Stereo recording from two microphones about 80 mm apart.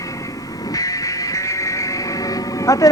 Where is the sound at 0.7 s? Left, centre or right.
Left.